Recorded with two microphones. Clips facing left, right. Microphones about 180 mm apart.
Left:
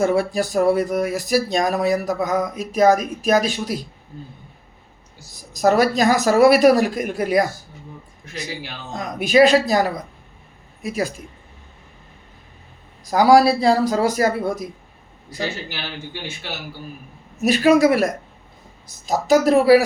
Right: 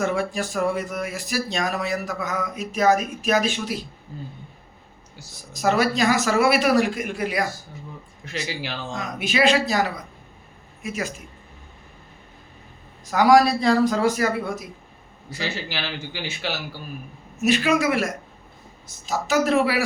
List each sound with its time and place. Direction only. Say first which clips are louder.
0.0 s speech: left 5 dB; 35° left (ahead or behind)
5.5 s speech: left 4 dB; 40° left (ahead or behind)
8.3 s a man's voice: right 1 dB; 85° right
9.0 s speech: left 9 dB; 40° left (ahead or behind)
10.8 s speech: left 5 dB; 35° left (ahead or behind)
13.1 s speech: left 3 dB; 35° left (ahead or behind)
15.7 s a man's voice: right 1 dB; 90° right
17.5 s speech: left 6 dB; 40° left (ahead or behind)